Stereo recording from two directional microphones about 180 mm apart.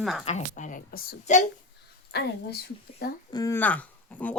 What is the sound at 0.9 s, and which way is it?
Speech, 60° left (ahead or behind).